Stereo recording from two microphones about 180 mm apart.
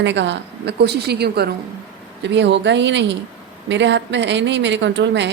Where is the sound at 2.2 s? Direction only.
75° right (ahead or behind).